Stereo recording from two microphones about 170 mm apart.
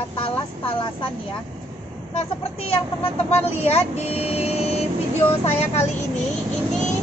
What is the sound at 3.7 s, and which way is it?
Speech, 35° left (ahead or behind).